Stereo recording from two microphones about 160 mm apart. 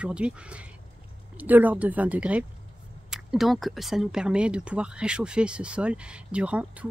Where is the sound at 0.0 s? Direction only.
5° right (ahead or behind).